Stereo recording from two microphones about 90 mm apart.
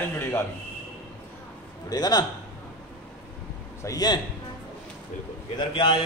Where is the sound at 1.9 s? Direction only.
45° left (ahead or behind).